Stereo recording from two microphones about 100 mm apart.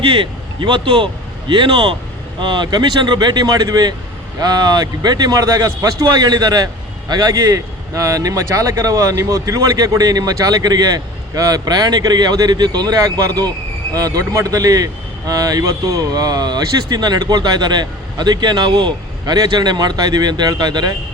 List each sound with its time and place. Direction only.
0.0 s speech: 60° right (ahead or behind)
2.4 s a man's voice: 50° right (ahead or behind)